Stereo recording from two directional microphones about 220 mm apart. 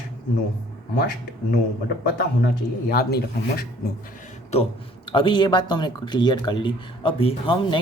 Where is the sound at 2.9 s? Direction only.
45° left (ahead or behind).